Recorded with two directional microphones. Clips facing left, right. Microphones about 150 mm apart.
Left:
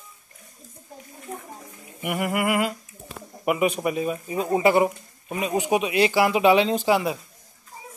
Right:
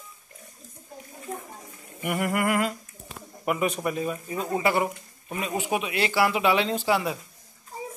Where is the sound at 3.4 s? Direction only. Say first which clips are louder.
Left 4 dB; 15° left (ahead or behind).